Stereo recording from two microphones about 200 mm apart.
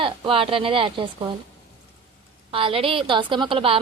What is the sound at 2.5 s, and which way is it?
A woman's voice, 25° right (ahead or behind).